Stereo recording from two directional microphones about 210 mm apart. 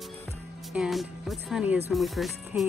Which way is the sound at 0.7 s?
Centre (ahead or behind).